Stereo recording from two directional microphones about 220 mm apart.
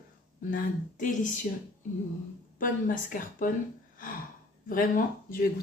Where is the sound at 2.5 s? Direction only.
35° left (ahead or behind).